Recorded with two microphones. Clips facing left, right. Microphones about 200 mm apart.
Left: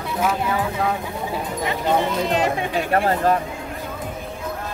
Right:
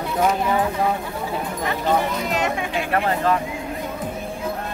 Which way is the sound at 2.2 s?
35° left (ahead or behind).